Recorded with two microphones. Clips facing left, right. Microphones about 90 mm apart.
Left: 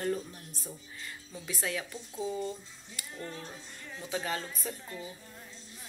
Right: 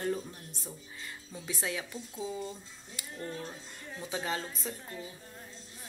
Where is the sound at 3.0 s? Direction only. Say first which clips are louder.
Even; 25° right (ahead or behind).